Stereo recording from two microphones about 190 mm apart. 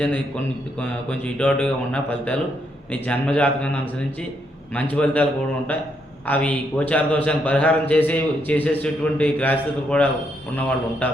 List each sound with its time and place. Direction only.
0.8 s a man's voice: 10° left (ahead or behind)
4.7 s a man's voice: 5° left (ahead or behind)